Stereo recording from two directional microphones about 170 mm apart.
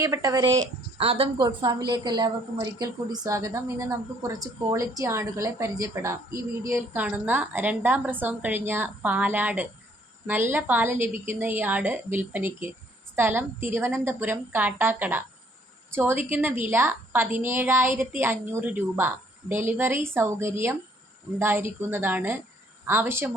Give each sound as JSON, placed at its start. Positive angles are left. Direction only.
{"t": 0.0, "sound": "speech", "side_deg": -20}
{"t": 0.9, "sound": "a woman's voice", "side_deg": -35}